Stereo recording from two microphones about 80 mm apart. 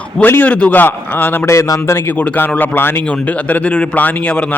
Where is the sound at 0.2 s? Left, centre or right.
Left.